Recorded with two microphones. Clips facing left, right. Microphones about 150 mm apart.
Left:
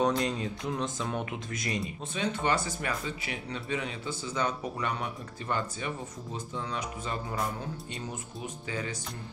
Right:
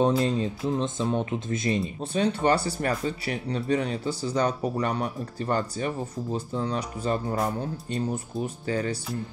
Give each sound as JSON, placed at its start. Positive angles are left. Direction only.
{"t": 0.2, "sound": "speech", "side_deg": -30}